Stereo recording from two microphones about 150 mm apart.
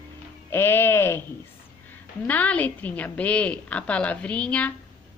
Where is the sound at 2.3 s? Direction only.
10° left (ahead or behind).